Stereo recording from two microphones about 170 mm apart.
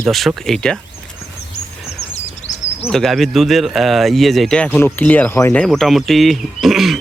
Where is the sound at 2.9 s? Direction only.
Centre (ahead or behind).